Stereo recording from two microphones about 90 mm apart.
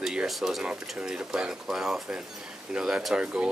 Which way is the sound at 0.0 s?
5° right (ahead or behind).